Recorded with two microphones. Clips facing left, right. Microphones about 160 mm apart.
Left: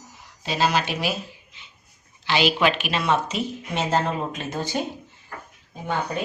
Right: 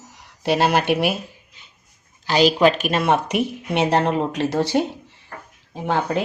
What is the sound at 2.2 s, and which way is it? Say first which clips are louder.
A woman's voice: right 5 dB; 40° right (ahead or behind).